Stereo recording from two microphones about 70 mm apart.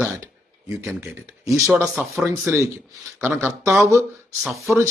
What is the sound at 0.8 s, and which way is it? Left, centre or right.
Speech, right.